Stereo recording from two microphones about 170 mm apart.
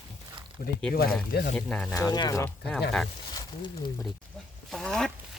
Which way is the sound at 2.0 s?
25° left (ahead or behind).